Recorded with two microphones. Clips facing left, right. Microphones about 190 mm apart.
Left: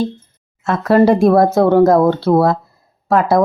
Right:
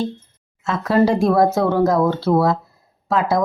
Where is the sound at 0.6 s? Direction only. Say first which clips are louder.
Left 5 dB; 55° left (ahead or behind).